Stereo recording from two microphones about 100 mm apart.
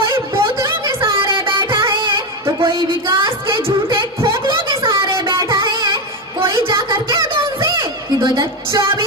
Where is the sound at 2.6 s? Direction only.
50° right (ahead or behind).